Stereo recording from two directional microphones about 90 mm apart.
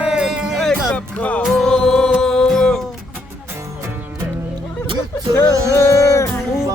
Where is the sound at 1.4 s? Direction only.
5° left (ahead or behind).